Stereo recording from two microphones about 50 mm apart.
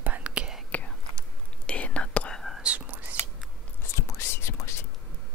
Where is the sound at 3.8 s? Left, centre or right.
Left.